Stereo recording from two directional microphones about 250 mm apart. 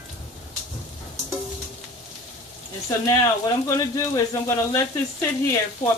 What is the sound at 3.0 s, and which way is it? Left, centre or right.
Speech, centre.